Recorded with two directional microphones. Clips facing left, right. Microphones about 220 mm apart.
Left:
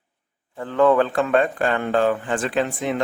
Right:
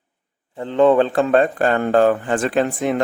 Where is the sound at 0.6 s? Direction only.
20° right (ahead or behind).